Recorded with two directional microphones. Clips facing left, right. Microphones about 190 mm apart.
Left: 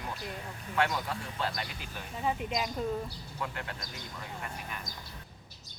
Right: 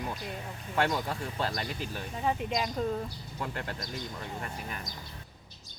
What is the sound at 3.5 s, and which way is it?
Speech, 35° right (ahead or behind).